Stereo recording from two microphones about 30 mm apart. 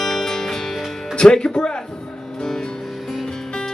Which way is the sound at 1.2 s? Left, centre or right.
Left.